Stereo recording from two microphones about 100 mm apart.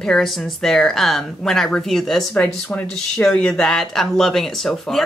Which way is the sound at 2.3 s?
15° left (ahead or behind).